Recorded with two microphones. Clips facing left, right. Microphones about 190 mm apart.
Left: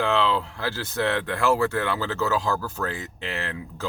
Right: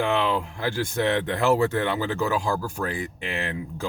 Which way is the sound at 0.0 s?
15° right (ahead or behind).